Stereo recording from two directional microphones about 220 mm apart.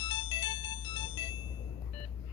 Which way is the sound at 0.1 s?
20° left (ahead or behind).